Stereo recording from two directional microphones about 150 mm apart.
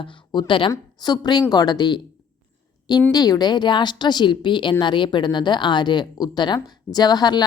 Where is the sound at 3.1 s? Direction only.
25° left (ahead or behind).